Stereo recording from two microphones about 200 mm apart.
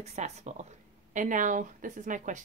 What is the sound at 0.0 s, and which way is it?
Speech, 35° right (ahead or behind).